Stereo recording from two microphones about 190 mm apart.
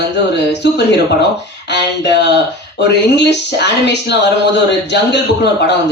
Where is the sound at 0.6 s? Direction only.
65° left (ahead or behind).